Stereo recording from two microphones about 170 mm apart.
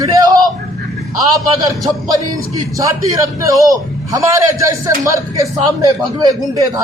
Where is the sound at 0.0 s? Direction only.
20° right (ahead or behind).